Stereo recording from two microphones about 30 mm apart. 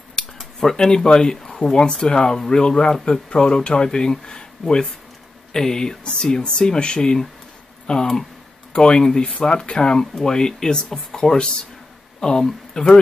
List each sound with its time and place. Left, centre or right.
0.2 s a sound: left
0.7 s speech: left
5.5 s speech: centre
9.9 s speech: centre